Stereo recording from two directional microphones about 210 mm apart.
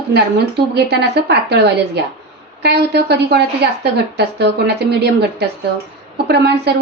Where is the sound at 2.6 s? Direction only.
50° right (ahead or behind).